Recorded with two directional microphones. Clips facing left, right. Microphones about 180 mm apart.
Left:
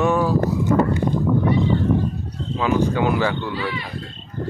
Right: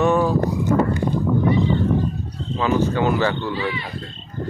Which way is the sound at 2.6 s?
10° left (ahead or behind).